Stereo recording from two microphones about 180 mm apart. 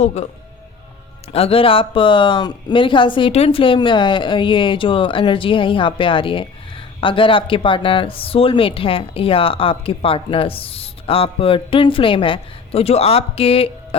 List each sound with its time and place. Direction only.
0.0 s speech: 40° left (ahead or behind)
1.3 s speech: 30° left (ahead or behind)